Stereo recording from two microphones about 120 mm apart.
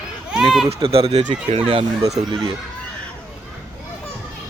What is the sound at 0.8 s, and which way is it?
Speech, 55° right (ahead or behind).